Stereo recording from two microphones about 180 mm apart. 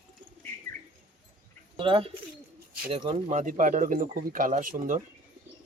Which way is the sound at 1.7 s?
30° right (ahead or behind).